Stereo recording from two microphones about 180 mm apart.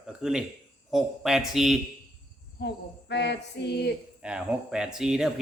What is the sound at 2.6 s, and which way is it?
Cricket, 70° left (ahead or behind).